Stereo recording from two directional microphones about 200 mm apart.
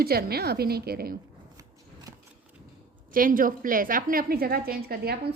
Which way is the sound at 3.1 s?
45° right (ahead or behind).